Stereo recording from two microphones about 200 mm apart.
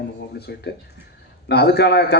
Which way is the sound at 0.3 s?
55° left (ahead or behind).